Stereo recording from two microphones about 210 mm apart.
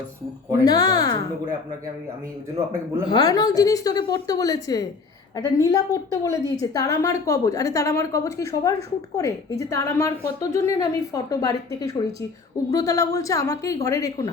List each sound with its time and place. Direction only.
0.6 s speech: 20° left (ahead or behind)
3.1 s a woman's voice: 20° left (ahead or behind)